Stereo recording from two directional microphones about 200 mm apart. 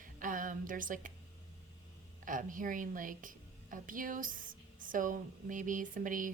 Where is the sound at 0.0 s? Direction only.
40° right (ahead or behind).